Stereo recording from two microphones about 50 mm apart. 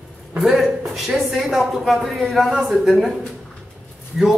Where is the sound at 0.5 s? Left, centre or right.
Centre.